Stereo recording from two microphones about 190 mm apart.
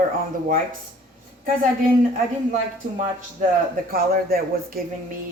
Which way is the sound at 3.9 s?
50° right (ahead or behind).